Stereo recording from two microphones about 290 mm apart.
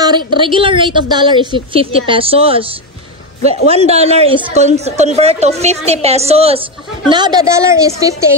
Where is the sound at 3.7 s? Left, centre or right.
Right.